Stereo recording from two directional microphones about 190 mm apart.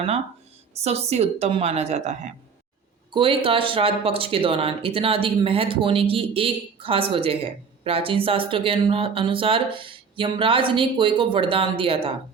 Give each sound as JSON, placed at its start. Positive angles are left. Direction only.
{"t": 0.7, "sound": "a woman's voice", "side_deg": -35}